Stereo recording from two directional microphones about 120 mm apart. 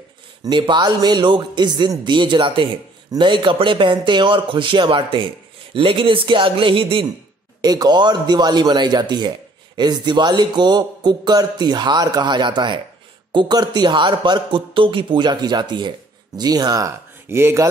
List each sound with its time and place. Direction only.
0.4 s a man's voice: 40° right (ahead or behind)
7.6 s a man's voice: 35° right (ahead or behind)